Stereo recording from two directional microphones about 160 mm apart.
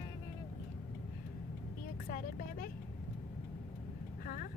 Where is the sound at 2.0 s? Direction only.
60° left (ahead or behind).